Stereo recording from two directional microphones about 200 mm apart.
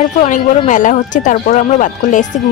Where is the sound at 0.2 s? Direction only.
35° left (ahead or behind).